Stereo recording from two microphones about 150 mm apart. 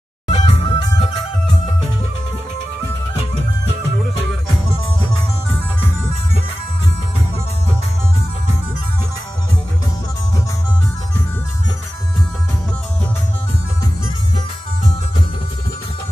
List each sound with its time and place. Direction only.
0.3 s music: 50° left (ahead or behind)
0.6 s music: 35° left (ahead or behind)